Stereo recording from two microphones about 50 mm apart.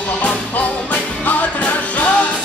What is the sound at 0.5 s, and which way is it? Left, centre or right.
Music, left.